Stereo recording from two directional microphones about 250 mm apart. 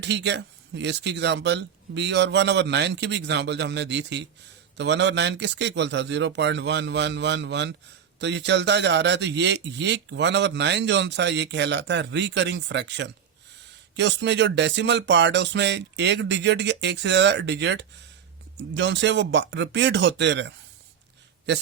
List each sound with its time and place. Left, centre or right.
0.0 s a man's voice: right